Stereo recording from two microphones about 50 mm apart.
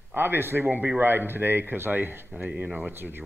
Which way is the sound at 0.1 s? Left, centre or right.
Right.